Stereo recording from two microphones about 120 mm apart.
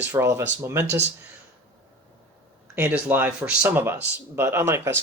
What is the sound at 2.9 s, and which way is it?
Speech, 15° right (ahead or behind).